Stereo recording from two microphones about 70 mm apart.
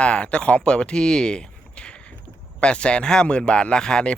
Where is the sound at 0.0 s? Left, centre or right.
Centre.